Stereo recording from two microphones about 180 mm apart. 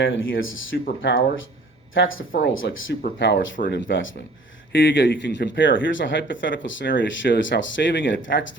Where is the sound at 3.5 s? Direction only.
50° left (ahead or behind).